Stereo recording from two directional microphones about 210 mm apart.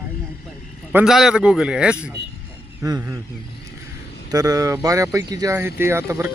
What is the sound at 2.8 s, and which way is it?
Speech, 15° right (ahead or behind).